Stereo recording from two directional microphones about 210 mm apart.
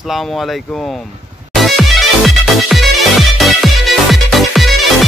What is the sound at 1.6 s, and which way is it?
Music, centre (ahead or behind).